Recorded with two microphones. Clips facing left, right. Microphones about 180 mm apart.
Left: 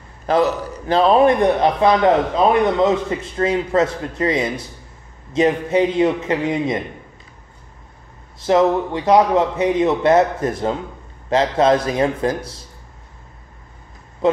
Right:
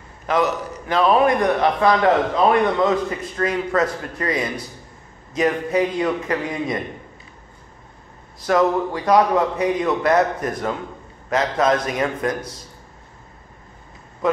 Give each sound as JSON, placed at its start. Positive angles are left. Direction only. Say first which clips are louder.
{"t": 0.3, "sound": "a man's voice", "louder": "left 3 dB", "side_deg": 30}
{"t": 8.4, "sound": "a man's voice", "louder": "left 3 dB", "side_deg": 25}
{"t": 14.2, "sound": "a man's voice", "louder": "left 3 dB", "side_deg": 25}